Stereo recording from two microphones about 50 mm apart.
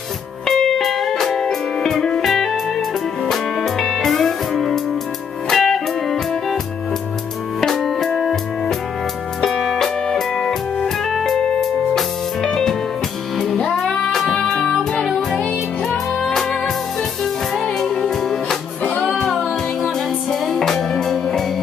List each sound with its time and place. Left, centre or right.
0.5 s music: centre
7.6 s music: centre
18.9 s music: left
19.1 s music: centre